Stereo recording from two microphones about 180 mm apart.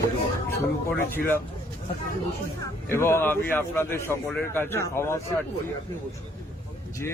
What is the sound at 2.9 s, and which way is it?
A man's voice, 15° left (ahead or behind).